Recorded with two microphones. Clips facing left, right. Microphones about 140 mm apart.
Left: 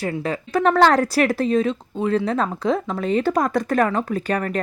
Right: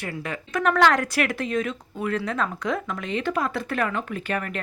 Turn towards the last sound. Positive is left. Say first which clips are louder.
# left 6 dB
turn(degrees=35)  # may be behind; listen again after turning